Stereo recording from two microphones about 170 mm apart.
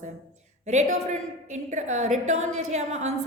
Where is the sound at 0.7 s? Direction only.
45° right (ahead or behind).